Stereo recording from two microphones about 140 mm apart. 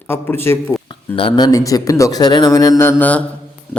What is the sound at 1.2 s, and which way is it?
Speech, 40° left (ahead or behind).